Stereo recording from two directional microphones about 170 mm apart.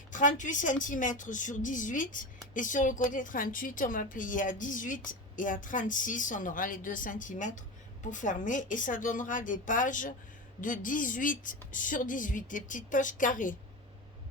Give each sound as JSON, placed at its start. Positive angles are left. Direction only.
{"t": 0.1, "sound": "a woman's voice", "side_deg": 50}